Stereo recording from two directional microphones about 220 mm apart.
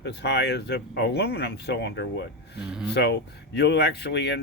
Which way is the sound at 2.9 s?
50° left (ahead or behind).